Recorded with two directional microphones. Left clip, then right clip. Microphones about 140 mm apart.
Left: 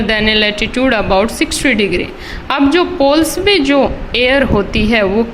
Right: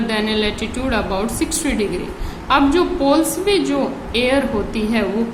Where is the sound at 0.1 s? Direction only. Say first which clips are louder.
Left 9 dB; 45° left (ahead or behind).